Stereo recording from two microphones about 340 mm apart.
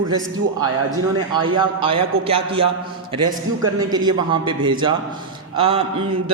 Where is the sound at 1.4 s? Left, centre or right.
Centre.